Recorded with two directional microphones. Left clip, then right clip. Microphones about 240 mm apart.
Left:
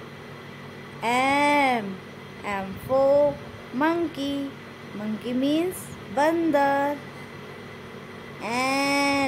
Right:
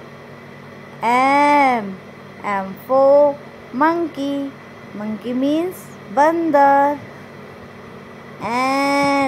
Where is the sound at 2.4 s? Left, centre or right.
Centre.